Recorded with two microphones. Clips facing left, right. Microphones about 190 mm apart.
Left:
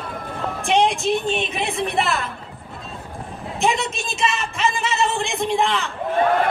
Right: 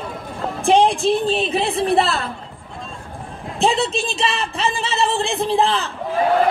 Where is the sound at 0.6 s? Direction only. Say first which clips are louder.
Right 4 dB; 35° right (ahead or behind).